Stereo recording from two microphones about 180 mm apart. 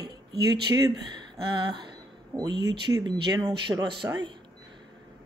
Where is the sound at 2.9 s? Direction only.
25° right (ahead or behind).